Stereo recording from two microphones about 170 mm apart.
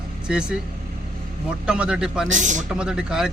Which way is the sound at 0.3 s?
5° right (ahead or behind).